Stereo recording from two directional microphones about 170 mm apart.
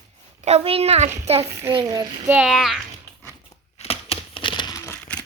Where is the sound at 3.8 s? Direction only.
35° left (ahead or behind).